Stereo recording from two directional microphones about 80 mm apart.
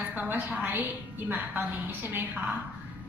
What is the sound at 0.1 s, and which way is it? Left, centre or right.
A woman's voice, right.